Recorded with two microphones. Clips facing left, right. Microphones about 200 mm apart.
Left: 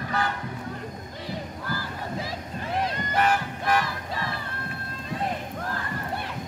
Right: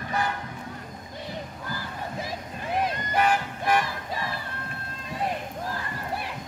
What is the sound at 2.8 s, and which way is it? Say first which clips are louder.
Music: even; 15° right (ahead or behind).